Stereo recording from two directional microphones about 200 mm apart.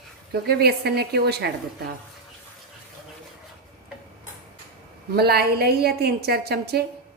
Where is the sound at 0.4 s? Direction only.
55° right (ahead or behind).